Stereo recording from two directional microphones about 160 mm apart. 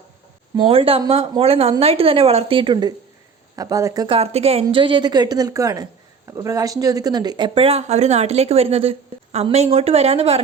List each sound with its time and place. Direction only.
0.5 s a woman's voice: 30° right (ahead or behind)
4.1 s a woman's voice: 40° right (ahead or behind)